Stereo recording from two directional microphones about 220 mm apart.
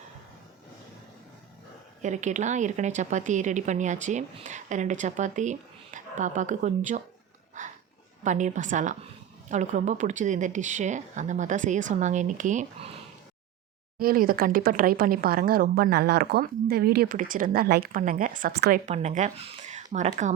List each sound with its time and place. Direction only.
2.0 s a woman's voice: 30° right (ahead or behind)
8.2 s a woman's voice: 35° right (ahead or behind)
14.0 s a woman's voice: 40° right (ahead or behind)
18.9 s a woman's voice: 30° right (ahead or behind)